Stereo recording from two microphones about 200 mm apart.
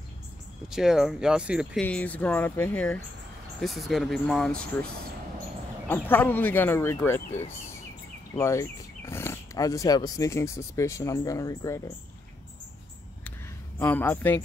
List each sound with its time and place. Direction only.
0.7 s speech: centre (ahead or behind)
1.8 s speech: 5° left (ahead or behind)
5.9 s speech: 10° left (ahead or behind)
7.2 s speech: 35° left (ahead or behind)
8.4 s speech: 15° left (ahead or behind)
13.7 s speech: 10° left (ahead or behind)